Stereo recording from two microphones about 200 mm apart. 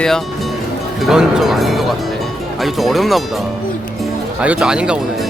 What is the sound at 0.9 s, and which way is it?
Speech, centre (ahead or behind).